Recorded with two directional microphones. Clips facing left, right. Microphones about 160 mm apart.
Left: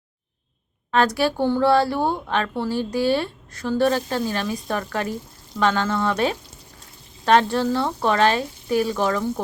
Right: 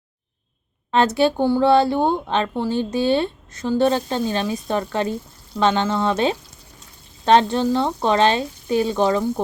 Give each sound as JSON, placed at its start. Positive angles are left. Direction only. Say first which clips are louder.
{"t": 0.9, "sound": "speech", "louder": "right 3 dB", "side_deg": -25}
{"t": 1.5, "sound": "speech", "louder": "left 1 dB", "side_deg": -10}
{"t": 1.7, "sound": "speech", "louder": "right 3 dB", "side_deg": -20}